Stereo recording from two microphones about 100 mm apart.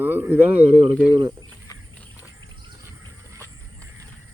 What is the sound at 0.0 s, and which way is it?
Speech, 20° right (ahead or behind).